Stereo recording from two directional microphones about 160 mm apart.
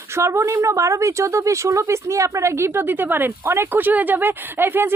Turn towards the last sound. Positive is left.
turn(degrees=-15)  # may be behind; listen again after turning